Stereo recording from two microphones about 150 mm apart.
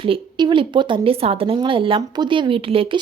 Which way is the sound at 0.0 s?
35° right (ahead or behind).